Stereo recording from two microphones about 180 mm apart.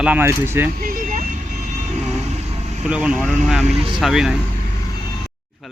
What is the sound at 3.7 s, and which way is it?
Speech, 30° right (ahead or behind).